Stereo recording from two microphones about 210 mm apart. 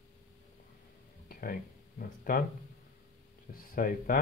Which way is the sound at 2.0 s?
40° left (ahead or behind).